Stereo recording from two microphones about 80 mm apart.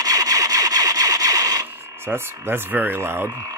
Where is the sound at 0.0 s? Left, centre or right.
Right.